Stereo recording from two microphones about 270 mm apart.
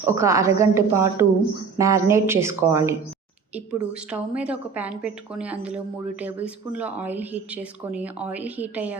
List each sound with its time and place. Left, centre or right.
0.1 s a woman's voice: centre